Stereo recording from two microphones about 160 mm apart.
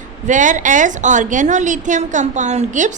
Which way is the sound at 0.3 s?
50° right (ahead or behind).